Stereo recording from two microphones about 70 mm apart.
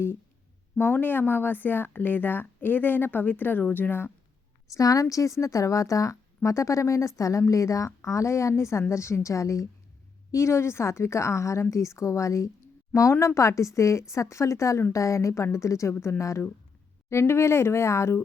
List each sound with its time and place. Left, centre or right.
0.8 s speech: left
4.7 s a woman's voice: left